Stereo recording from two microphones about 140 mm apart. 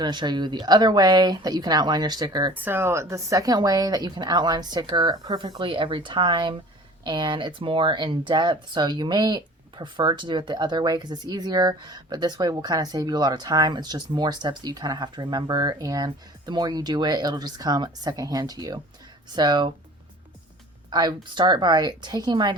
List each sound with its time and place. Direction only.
0.0 s speech: 30° right (ahead or behind)
2.5 s speech: 15° right (ahead or behind); by 19.7 s 30° right (ahead or behind)
20.9 s speech: 30° right (ahead or behind)